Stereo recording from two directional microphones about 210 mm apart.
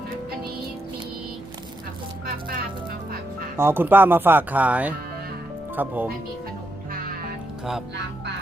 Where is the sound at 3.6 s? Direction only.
10° right (ahead or behind).